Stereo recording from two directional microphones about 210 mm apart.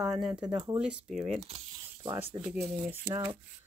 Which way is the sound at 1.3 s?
30° right (ahead or behind).